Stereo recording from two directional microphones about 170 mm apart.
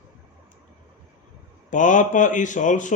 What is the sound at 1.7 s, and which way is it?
Speech, 50° left (ahead or behind).